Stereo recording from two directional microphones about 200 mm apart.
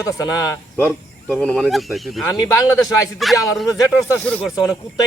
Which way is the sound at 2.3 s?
20° left (ahead or behind).